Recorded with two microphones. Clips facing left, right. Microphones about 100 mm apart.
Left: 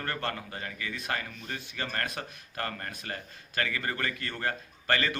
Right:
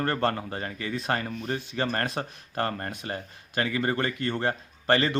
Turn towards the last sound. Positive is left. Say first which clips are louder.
# right 5 dB
turn(degrees=-30)  # may be behind; listen again after turning